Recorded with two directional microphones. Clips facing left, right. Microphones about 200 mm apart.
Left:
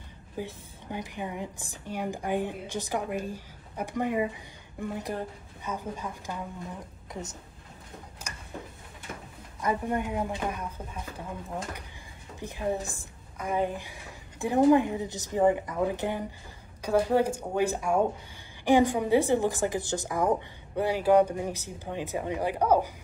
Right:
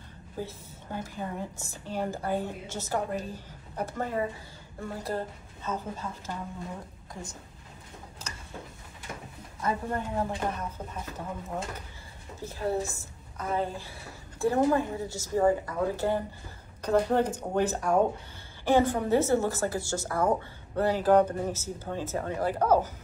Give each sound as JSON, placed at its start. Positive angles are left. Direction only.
{"t": 0.4, "sound": "a woman's voice", "side_deg": 15}
{"t": 9.6, "sound": "a woman's voice", "side_deg": 15}
{"t": 12.4, "sound": "a woman's voice", "side_deg": 15}